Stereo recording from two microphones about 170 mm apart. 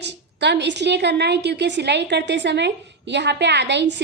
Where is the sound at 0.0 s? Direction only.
90° right.